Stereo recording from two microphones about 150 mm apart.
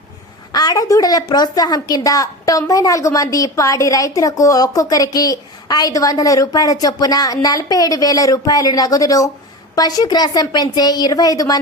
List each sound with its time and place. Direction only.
0.5 s a woman's voice: 25° left (ahead or behind)